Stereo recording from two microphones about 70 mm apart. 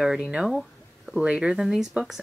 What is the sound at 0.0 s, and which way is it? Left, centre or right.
Speech, centre.